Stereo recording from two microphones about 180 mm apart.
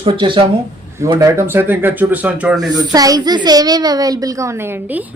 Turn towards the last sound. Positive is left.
turn(degrees=-20)  # may be behind; listen again after turning